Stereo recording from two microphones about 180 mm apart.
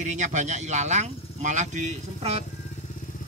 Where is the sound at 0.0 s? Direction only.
40° right (ahead or behind).